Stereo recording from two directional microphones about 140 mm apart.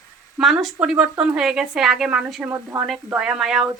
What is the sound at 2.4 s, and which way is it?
Speech, 20° right (ahead or behind).